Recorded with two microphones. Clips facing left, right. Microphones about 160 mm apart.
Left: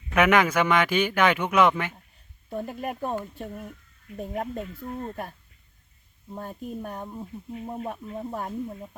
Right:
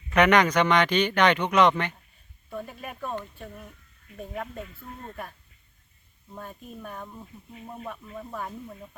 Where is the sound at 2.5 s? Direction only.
40° left (ahead or behind).